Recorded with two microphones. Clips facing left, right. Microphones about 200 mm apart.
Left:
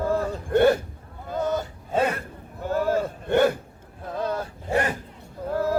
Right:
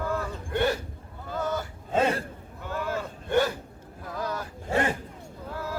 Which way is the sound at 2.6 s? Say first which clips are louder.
Left 8 dB; 40° left (ahead or behind).